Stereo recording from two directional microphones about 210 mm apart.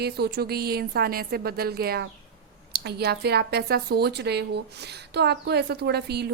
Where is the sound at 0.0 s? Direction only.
50° right (ahead or behind).